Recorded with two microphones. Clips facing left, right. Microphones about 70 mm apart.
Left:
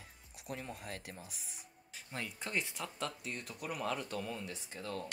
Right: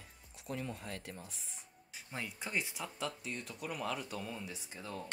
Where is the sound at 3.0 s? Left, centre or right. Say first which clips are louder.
Right 1 dB; centre.